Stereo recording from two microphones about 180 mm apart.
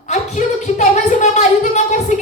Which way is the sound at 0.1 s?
40° left (ahead or behind).